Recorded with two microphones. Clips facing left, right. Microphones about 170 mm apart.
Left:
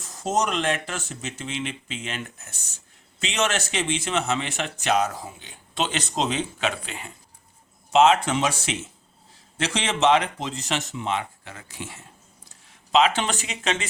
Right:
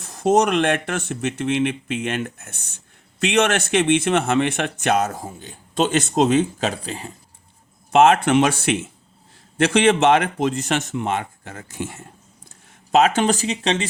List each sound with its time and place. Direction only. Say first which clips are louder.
0.0 s speech: right 8 dB; 65° right (ahead or behind); by 7.1 s 35° right (ahead or behind)
7.9 s speech: right 4 dB; 55° right (ahead or behind); by 13.8 s 35° right (ahead or behind)